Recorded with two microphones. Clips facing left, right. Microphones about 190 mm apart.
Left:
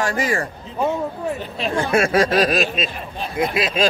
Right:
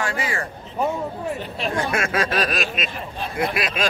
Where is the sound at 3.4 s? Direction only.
25° left (ahead or behind).